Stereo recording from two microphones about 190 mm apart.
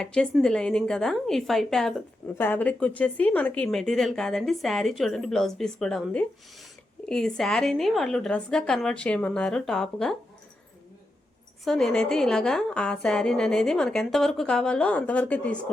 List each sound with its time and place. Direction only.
0.0 s a woman's voice: 5° left (ahead or behind)
11.6 s a woman's voice: centre (ahead or behind)